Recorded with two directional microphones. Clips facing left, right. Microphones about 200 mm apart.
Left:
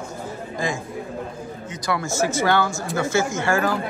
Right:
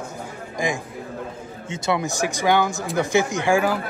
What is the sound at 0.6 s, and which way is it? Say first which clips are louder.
A man's voice: right 2 dB; 15° right (ahead or behind).